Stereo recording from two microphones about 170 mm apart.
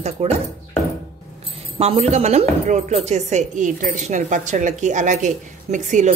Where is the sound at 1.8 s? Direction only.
35° right (ahead or behind).